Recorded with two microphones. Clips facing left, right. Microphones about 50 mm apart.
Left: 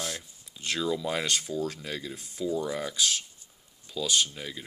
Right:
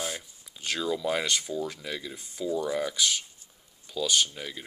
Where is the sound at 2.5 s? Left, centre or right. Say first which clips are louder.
Right 4 dB; right.